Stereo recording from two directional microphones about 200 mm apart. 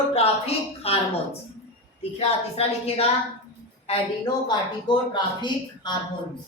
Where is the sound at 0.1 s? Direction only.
30° left (ahead or behind).